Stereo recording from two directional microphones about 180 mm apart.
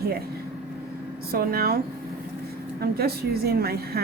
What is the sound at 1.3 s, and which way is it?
Speech, 55° right (ahead or behind).